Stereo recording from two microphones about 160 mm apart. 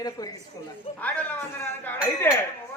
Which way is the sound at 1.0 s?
10° left (ahead or behind).